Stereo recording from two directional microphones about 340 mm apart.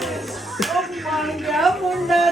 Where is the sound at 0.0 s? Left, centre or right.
Centre.